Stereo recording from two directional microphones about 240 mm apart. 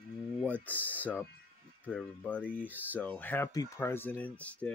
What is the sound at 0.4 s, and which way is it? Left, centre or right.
Speech, centre.